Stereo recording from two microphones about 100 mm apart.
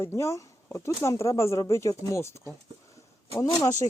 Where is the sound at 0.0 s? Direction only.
25° left (ahead or behind).